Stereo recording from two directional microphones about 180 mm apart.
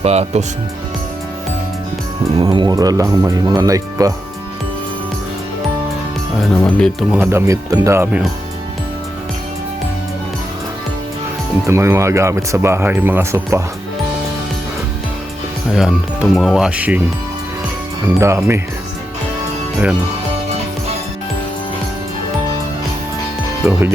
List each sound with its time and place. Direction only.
0.0 s speech: 35° right (ahead or behind)
2.4 s speech: 25° right (ahead or behind)
6.5 s speech: 10° left (ahead or behind)
7.1 s speech: 10° right (ahead or behind)
11.6 s speech: 15° right (ahead or behind)
15.7 s speech: centre (ahead or behind)
18.2 s speech: 15° right (ahead or behind)
23.6 s speech: 15° right (ahead or behind)